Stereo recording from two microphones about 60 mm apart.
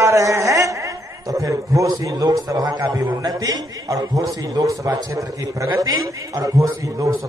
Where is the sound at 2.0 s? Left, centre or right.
Right.